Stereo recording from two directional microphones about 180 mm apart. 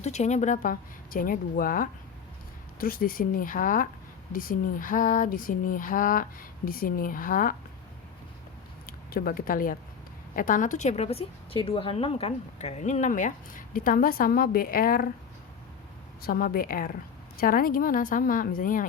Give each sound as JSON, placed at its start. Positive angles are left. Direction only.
{"t": 0.0, "sound": "a woman's voice", "side_deg": 40}
{"t": 8.9, "sound": "a woman's voice", "side_deg": 55}
{"t": 16.2, "sound": "a woman's voice", "side_deg": 55}